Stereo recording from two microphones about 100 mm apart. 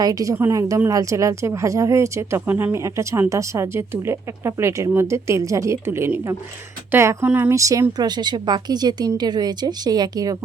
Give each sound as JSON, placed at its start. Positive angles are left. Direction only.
{"t": 0.0, "sound": "speech", "side_deg": -35}
{"t": 7.5, "sound": "a woman's voice", "side_deg": -30}